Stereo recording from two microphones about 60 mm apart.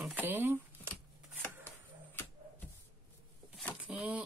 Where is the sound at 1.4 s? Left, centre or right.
Left.